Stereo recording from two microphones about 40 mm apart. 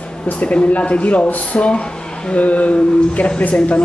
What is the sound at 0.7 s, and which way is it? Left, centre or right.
Speech, left.